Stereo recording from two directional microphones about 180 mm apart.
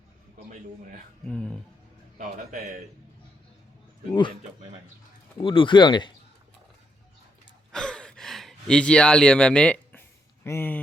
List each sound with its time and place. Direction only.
1.2 s speech: 5° left (ahead or behind)
5.4 s speech: 30° left (ahead or behind)
7.7 s a sound: 5° left (ahead or behind)
10.4 s speech: 15° left (ahead or behind)